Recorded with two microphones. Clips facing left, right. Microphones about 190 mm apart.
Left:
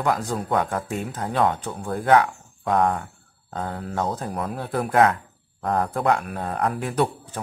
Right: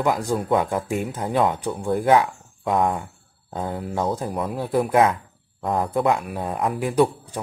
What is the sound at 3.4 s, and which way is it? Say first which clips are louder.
Mantra: right 2 dB; 15° right (ahead or behind).